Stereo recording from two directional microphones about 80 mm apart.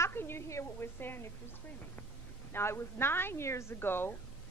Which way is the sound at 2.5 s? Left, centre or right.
Left.